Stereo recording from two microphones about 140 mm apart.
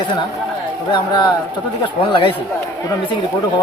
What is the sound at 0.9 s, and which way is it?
Speech, 35° left (ahead or behind).